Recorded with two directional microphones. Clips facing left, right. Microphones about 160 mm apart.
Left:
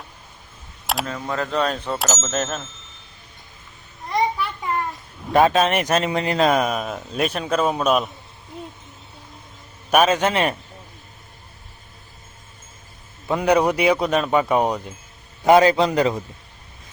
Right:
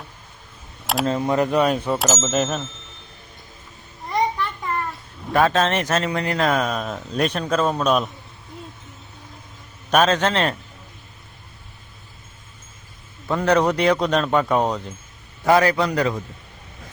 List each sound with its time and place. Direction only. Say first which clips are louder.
1.0 s speech: right 7 dB; 25° right (ahead or behind); by 2.6 s centre (ahead or behind)
4.1 s a sound: even; 5° left (ahead or behind)
5.3 s speech: left 2 dB; 15° left (ahead or behind)
9.9 s speech: left 1 dB; 10° left (ahead or behind)
13.2 s speech: left 1 dB; 10° left (ahead or behind)
15.4 s a man's voice: left 3 dB; 20° left (ahead or behind)